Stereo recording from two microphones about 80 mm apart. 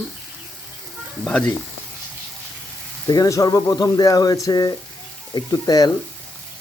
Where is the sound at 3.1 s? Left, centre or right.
Left.